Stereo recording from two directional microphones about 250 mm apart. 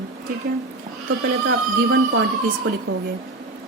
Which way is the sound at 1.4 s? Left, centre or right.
Right.